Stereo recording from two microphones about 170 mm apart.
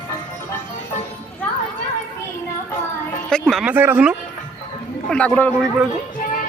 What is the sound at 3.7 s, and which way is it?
Speech, 10° right (ahead or behind).